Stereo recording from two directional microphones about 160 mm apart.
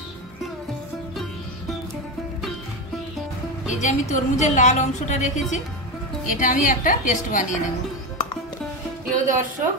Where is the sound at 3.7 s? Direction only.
45° left (ahead or behind).